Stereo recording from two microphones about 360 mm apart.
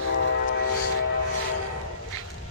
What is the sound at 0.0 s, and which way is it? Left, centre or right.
Train, left.